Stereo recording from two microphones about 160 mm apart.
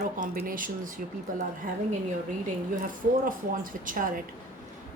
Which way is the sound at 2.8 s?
60° right (ahead or behind).